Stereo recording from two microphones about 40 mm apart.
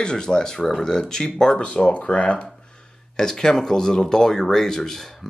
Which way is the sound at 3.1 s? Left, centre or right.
Centre.